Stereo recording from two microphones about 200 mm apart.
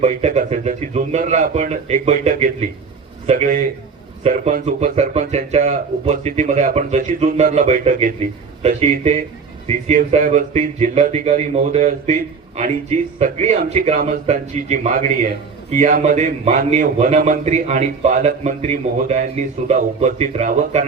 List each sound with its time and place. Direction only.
0.0 s a man's voice: 35° right (ahead or behind)